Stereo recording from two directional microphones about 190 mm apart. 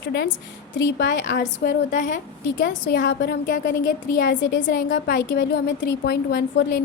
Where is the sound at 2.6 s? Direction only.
60° left (ahead or behind); by 5.4 s 45° left (ahead or behind).